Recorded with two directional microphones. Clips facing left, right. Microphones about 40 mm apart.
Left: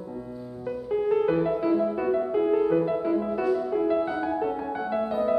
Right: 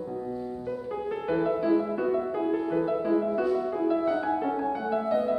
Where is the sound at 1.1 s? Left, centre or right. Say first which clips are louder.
Left 6 dB; centre.